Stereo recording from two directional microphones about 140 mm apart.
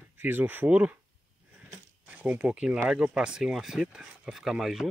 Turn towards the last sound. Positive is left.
turn(degrees=0)  # may be behind; listen again after turning